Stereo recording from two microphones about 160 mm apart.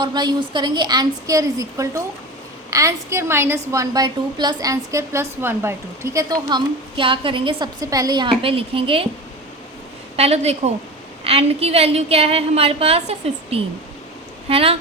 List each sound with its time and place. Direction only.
0.0 s a woman's voice: 25° right (ahead or behind)
10.2 s a woman's voice: 40° right (ahead or behind)